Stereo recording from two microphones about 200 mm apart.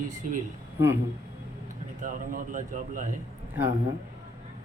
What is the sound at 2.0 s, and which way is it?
A man's voice, 40° right (ahead or behind).